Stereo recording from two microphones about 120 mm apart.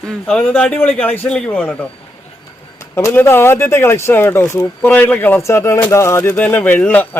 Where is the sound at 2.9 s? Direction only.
20° left (ahead or behind).